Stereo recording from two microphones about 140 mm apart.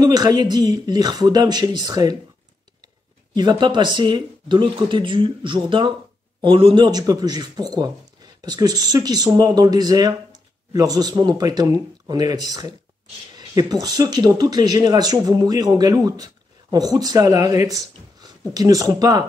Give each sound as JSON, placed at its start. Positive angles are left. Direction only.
{"t": 0.0, "sound": "speech", "side_deg": -30}
{"t": 3.3, "sound": "speech", "side_deg": -35}